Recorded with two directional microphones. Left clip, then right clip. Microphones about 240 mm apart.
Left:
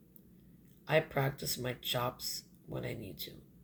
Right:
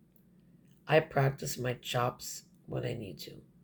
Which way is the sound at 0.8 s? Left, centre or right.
Right.